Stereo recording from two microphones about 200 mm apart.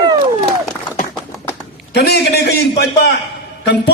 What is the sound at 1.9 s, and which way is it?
A man's voice, 55° left (ahead or behind).